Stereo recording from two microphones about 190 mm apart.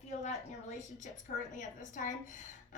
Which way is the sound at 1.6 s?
45° left (ahead or behind).